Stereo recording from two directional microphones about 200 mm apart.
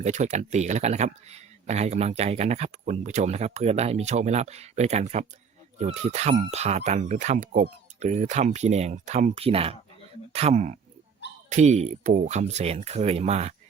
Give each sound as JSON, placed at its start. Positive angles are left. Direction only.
{"t": 0.0, "sound": "speech", "side_deg": -35}